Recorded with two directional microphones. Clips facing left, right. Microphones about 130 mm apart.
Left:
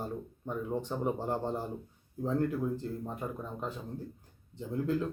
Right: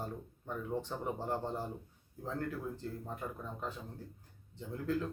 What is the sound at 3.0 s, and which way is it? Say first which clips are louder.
Speech: left 4 dB; 20° left (ahead or behind).